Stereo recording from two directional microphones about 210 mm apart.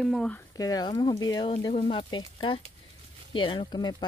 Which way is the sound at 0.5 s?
15° left (ahead or behind).